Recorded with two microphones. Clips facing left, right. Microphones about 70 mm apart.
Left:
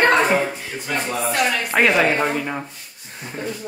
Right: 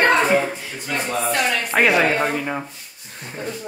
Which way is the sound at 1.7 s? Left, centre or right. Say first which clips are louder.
Even; centre.